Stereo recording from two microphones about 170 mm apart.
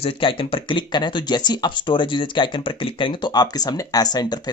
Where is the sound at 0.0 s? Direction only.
30° left (ahead or behind).